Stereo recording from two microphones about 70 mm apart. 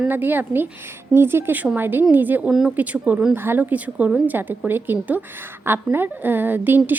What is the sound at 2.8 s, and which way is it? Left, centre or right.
A woman's voice, right.